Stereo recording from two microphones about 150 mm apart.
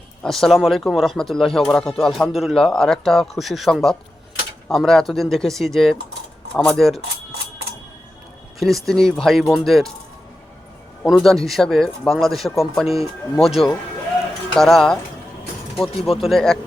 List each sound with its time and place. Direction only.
0.2 s speech: centre (ahead or behind)
8.5 s speech: centre (ahead or behind)
11.0 s speech: centre (ahead or behind)
16.0 s speech: 40° left (ahead or behind)
16.2 s speech: centre (ahead or behind)